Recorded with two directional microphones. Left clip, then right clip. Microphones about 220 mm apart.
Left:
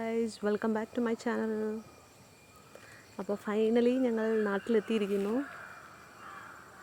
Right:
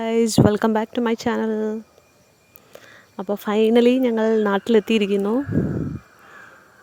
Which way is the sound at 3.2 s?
40° right (ahead or behind).